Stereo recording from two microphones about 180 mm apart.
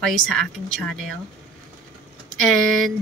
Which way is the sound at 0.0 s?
5° left (ahead or behind).